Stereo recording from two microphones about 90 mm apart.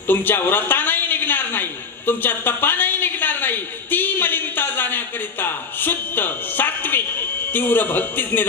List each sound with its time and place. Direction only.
0.0 s a man's voice: 20° left (ahead or behind)